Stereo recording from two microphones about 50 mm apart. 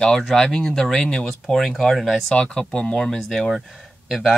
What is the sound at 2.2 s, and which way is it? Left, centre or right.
Speech, centre.